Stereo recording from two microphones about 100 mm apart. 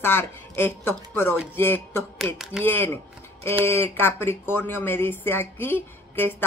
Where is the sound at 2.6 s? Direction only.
20° left (ahead or behind).